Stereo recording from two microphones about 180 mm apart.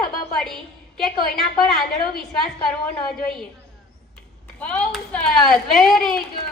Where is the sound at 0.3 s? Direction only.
Centre (ahead or behind).